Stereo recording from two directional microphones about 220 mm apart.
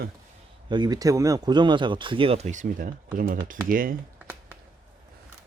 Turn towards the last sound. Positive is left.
turn(degrees=-40)  # may be behind; listen again after turning